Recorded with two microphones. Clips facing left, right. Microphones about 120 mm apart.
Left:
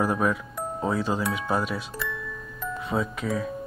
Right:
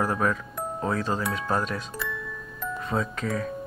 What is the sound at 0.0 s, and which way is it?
Speech, 10° left (ahead or behind).